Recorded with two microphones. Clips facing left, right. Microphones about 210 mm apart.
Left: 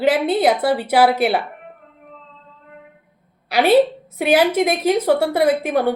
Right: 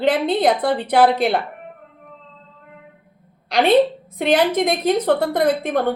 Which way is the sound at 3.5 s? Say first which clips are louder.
Left 1 dB; 5° left (ahead or behind).